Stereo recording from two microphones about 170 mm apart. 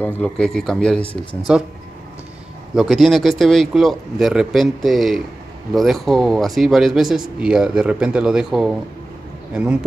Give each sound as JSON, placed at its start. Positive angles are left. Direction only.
{"t": 0.0, "sound": "speech", "side_deg": 5}
{"t": 2.7, "sound": "speech", "side_deg": 0}